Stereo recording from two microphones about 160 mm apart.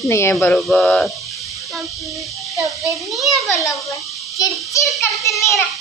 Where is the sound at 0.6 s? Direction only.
5° left (ahead or behind).